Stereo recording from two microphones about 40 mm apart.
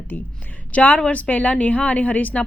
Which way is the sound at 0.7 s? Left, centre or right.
Left.